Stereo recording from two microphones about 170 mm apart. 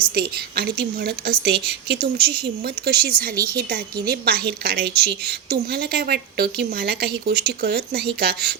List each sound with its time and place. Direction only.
0.1 s a woman's voice: 65° right (ahead or behind)